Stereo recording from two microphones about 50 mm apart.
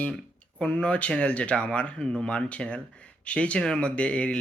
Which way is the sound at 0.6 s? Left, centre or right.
Centre.